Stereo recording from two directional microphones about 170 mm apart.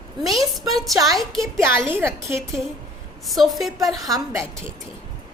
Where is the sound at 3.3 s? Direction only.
Centre (ahead or behind).